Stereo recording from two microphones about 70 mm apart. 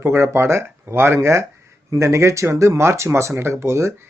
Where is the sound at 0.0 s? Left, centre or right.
Right.